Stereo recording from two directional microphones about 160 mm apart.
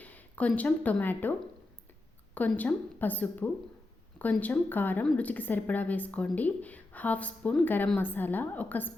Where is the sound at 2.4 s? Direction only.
10° left (ahead or behind).